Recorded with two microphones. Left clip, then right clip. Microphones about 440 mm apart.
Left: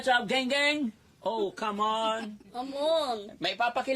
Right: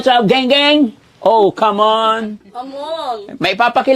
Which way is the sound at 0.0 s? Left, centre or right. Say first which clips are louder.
Right 15 dB; right.